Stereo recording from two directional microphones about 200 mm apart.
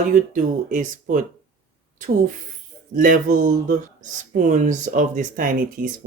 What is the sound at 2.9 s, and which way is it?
Speech, 40° right (ahead or behind).